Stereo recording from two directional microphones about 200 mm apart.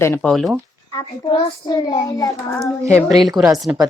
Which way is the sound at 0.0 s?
10° left (ahead or behind).